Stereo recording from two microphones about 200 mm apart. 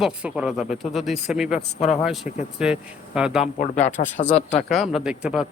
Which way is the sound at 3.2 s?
5° right (ahead or behind).